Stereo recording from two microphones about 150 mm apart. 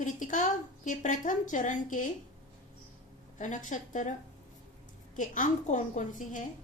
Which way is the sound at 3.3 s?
55° left (ahead or behind).